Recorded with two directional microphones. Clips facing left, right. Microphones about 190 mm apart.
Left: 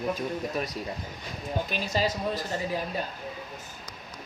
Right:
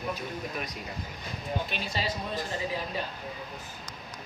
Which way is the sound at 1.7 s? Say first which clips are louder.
Left 5 dB; 40° left (ahead or behind).